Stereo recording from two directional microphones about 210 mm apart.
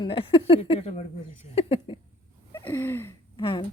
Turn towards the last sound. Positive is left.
turn(degrees=25)  # may be behind; listen again after turning